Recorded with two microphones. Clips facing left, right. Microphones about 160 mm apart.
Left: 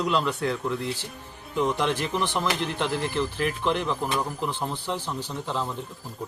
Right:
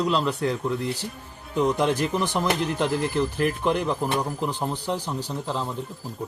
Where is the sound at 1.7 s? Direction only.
40° right (ahead or behind).